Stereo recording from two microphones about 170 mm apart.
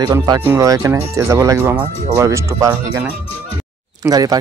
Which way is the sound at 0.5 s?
20° right (ahead or behind).